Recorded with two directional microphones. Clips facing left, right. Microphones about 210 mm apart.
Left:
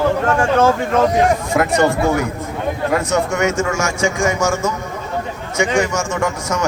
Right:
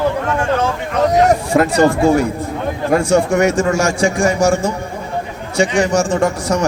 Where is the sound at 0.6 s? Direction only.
45° left (ahead or behind).